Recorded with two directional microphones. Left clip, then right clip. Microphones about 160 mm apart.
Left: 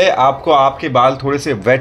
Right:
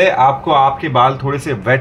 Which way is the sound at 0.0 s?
55° left (ahead or behind).